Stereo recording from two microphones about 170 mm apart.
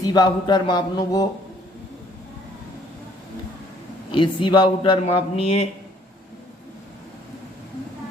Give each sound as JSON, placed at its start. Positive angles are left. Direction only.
{"t": 0.0, "sound": "speech", "side_deg": 25}
{"t": 4.1, "sound": "speech", "side_deg": 30}